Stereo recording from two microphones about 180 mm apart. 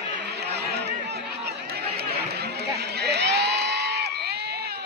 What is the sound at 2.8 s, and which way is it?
Crowd, 65° right (ahead or behind).